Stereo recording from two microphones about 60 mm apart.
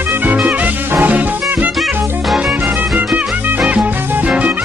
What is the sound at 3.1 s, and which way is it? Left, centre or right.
Music, right.